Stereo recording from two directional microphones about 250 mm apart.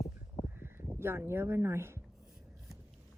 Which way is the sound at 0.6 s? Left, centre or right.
Centre.